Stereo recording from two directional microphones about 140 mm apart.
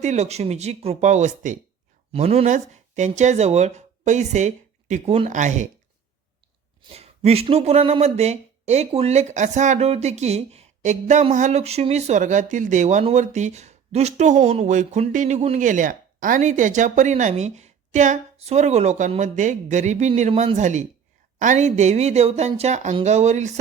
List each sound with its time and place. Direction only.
0.0 s speech: 55° right (ahead or behind)
2.1 s speech: 50° right (ahead or behind)
6.9 s speech: 45° right (ahead or behind)